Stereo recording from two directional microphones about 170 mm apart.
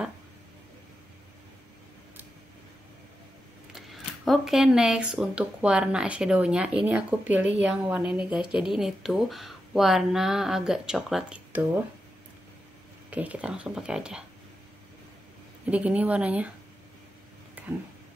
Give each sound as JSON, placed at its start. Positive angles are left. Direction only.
{"t": 3.7, "sound": "speech", "side_deg": 0}
{"t": 13.1, "sound": "speech", "side_deg": -10}
{"t": 15.6, "sound": "speech", "side_deg": -10}
{"t": 17.6, "sound": "a sound", "side_deg": -10}